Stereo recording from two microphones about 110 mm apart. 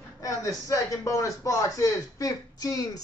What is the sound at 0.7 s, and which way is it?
Speech, 30° left (ahead or behind).